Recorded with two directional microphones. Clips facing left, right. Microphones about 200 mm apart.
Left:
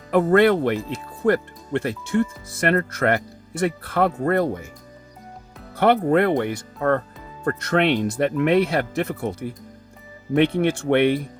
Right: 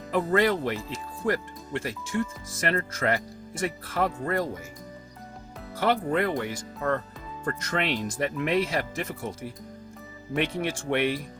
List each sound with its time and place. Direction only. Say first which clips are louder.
0.1 s speech: left 7 dB; 60° left (ahead or behind)
5.7 s speech: left 8 dB; 60° left (ahead or behind)